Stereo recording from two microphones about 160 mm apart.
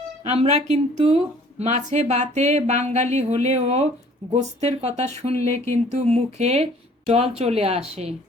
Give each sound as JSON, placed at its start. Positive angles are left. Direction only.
{"t": 0.3, "sound": "speech", "side_deg": -40}